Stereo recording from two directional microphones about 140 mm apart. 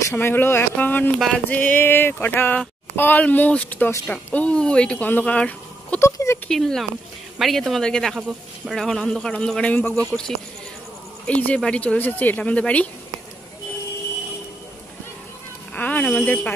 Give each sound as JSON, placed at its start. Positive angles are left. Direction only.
{"t": 0.1, "sound": "speech", "side_deg": 15}
{"t": 6.0, "sound": "speech", "side_deg": 20}
{"t": 6.5, "sound": "a man's voice", "side_deg": 5}
{"t": 15.7, "sound": "speech", "side_deg": 10}